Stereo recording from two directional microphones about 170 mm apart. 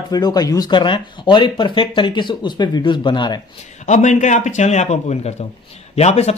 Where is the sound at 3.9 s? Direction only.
45° left (ahead or behind).